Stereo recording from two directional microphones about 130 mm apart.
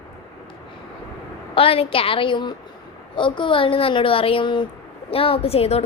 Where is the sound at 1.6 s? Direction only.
45° left (ahead or behind).